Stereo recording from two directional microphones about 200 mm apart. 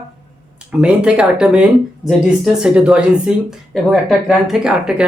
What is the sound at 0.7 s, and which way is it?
Speech, 5° right (ahead or behind).